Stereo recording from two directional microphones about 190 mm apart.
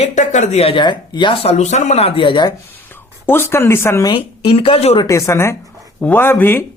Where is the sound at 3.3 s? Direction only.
10° left (ahead or behind).